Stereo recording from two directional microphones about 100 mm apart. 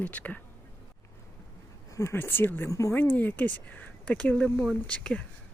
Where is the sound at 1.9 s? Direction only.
30° left (ahead or behind).